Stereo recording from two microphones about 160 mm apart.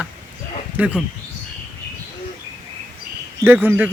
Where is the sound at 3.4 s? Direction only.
15° right (ahead or behind).